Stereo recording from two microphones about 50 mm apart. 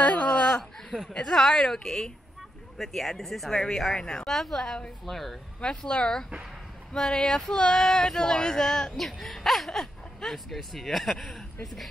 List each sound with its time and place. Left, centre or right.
0.0 s a sound: left
0.3 s a sound: centre
1.3 s female singing: centre
2.8 s speech: centre
5.6 s female singing: centre
8.9 s speech: centre